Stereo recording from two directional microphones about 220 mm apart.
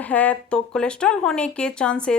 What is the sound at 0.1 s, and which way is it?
Speech, 5° left (ahead or behind).